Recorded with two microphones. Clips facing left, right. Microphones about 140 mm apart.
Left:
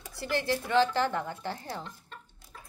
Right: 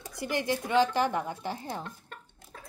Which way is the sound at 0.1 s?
15° right (ahead or behind).